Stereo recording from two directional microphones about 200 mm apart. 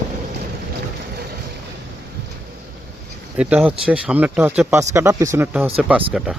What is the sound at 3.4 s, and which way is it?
Speech, 5° right (ahead or behind).